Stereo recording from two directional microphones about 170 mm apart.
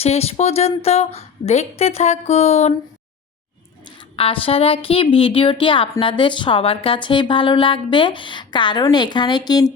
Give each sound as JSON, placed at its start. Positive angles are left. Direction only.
{"t": 0.0, "sound": "a woman's voice", "side_deg": 35}
{"t": 4.2, "sound": "a woman's voice", "side_deg": 35}